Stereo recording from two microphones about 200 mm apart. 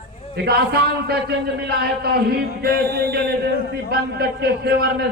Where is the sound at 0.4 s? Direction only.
50° right (ahead or behind).